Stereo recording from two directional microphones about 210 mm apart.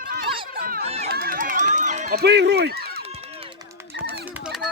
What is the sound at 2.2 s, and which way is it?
Speech, 55° right (ahead or behind).